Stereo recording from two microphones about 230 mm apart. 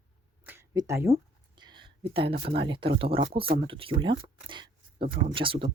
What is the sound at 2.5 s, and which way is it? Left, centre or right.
Speech, right.